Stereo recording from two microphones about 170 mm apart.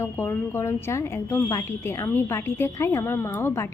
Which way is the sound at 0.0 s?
15° left (ahead or behind).